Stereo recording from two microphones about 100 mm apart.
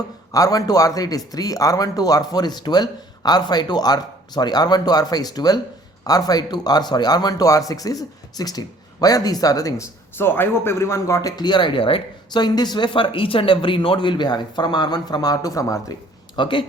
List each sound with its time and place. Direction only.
0.3 s speech: 35° left (ahead or behind); by 12.0 s 60° left (ahead or behind)
12.3 s speech: 45° left (ahead or behind)
16.3 s speech: 55° left (ahead or behind)